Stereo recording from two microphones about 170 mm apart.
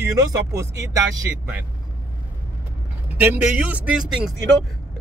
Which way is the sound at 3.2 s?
10° right (ahead or behind).